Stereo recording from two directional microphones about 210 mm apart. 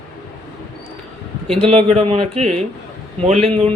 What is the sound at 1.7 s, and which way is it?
A man's voice, 30° right (ahead or behind).